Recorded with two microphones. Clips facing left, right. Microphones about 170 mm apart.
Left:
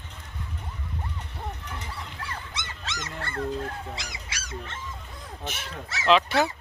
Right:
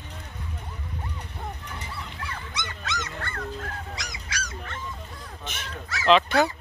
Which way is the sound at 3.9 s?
25° left (ahead or behind).